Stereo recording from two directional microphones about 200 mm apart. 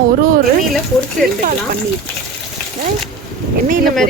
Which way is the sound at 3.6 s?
40° right (ahead or behind).